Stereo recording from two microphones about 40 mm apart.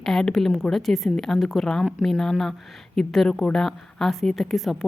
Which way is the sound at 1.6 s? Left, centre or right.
Centre.